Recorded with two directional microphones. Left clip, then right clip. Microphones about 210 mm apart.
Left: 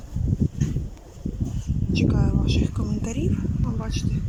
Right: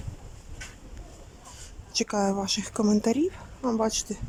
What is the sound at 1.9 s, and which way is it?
A woman's voice, 30° right (ahead or behind).